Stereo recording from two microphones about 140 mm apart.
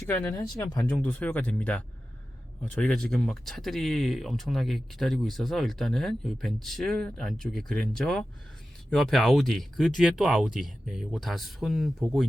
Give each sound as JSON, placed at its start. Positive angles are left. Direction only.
{"t": 0.1, "sound": "speech", "side_deg": 15}
{"t": 0.9, "sound": "speech", "side_deg": 10}